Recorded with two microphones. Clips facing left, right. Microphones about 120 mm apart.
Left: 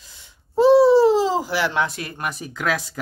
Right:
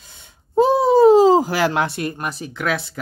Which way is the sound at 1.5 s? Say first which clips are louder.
Right 3 dB; 90° right.